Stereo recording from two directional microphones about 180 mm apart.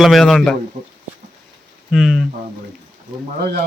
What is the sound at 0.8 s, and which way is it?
Speech, 45° right (ahead or behind).